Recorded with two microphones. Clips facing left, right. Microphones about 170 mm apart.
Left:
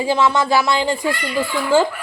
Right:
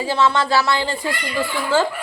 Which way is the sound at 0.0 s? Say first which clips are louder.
Left 2 dB; 15° left (ahead or behind).